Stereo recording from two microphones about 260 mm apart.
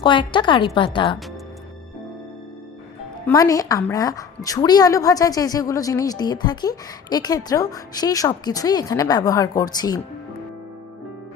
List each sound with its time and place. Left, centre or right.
0.0 s a woman's voice: centre
3.2 s a woman's voice: centre